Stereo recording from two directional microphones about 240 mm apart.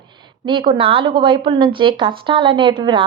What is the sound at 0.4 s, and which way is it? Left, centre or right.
A woman's voice, centre.